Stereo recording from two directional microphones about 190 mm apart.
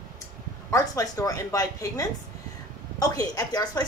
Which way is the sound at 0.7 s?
15° left (ahead or behind).